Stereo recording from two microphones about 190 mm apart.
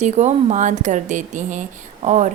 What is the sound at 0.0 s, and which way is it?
A woman's voice, 35° right (ahead or behind).